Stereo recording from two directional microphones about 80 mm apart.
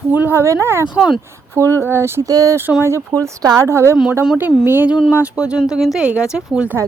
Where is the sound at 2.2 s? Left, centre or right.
Right.